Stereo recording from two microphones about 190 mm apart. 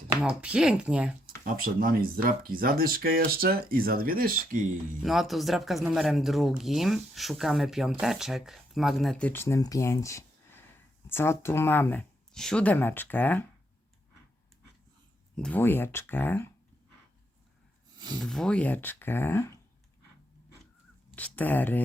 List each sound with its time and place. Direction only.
0.4 s speech: 5° right (ahead or behind)
1.5 s speech: 50° right (ahead or behind)
5.0 s speech: centre (ahead or behind)
15.4 s speech: 5° left (ahead or behind)
18.2 s speech: centre (ahead or behind)
21.2 s speech: 10° left (ahead or behind)